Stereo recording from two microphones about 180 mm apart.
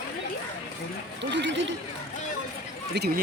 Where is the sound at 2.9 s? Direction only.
65° right (ahead or behind).